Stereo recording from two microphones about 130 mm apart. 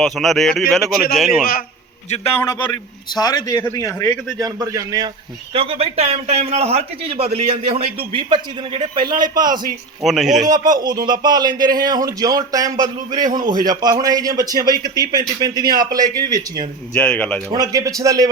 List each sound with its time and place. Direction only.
0.0 s speech: centre (ahead or behind)
2.0 s a man's voice: 55° left (ahead or behind)
2.3 s speech: 25° left (ahead or behind)
4.4 s a man's voice: 30° right (ahead or behind)
5.5 s a man's voice: 45° right (ahead or behind)
10.0 s speech: 5° right (ahead or behind)
10.4 s speech: 30° right (ahead or behind)
16.9 s speech: 10° left (ahead or behind)
17.5 s a man's voice: 30° right (ahead or behind)